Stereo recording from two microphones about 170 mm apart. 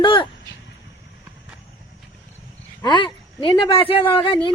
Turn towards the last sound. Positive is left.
turn(degrees=30)  # may be behind; listen again after turning